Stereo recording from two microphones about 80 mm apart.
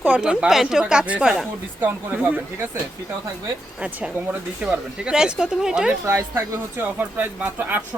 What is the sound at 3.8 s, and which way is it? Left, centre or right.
Speech, centre.